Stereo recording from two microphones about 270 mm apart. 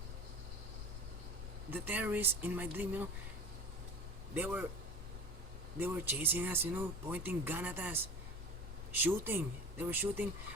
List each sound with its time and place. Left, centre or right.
1.7 s speech: centre
4.4 s speech: centre
5.8 s speech: centre
9.0 s speech: centre